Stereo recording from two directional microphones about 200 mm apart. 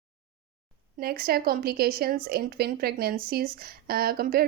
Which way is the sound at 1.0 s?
50° right (ahead or behind).